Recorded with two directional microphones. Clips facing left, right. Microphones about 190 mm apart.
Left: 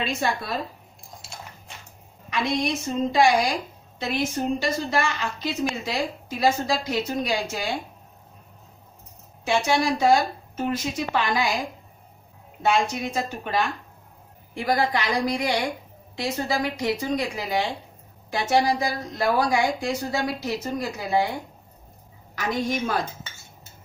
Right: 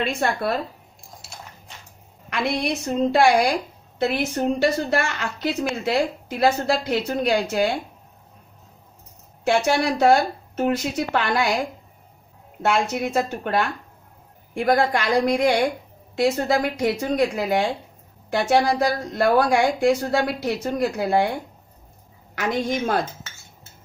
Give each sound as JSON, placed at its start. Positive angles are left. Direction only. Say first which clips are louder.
{"t": 0.0, "sound": "a woman's voice", "louder": "right 4 dB", "side_deg": -60}
{"t": 2.2, "sound": "a woman's voice", "louder": "right 1 dB", "side_deg": -65}
{"t": 9.5, "sound": "a woman's voice", "louder": "right 2 dB", "side_deg": -65}
{"t": 12.6, "sound": "a woman's voice", "louder": "right 1 dB", "side_deg": -60}
{"t": 16.4, "sound": "a woman's voice", "louder": "right 4 dB", "side_deg": -55}
{"t": 22.3, "sound": "a woman's voice", "louder": "right 2 dB", "side_deg": -60}